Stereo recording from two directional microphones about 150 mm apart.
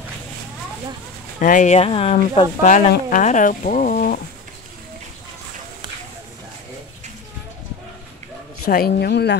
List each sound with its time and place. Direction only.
1.4 s speech: 60° left (ahead or behind)
8.6 s a woman's voice: 90° left